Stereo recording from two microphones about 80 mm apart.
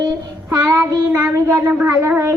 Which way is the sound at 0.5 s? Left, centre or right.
Right.